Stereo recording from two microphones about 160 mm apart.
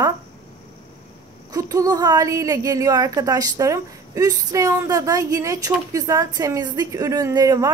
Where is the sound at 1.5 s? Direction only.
20° right (ahead or behind).